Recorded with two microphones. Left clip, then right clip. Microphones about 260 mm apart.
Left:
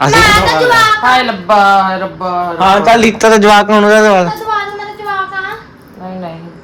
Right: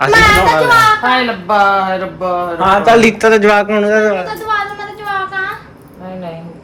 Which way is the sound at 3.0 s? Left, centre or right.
Centre.